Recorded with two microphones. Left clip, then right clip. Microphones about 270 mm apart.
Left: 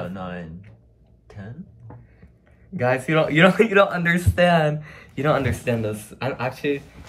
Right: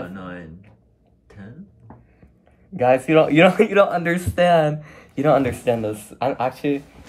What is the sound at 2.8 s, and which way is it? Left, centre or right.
Speech, centre.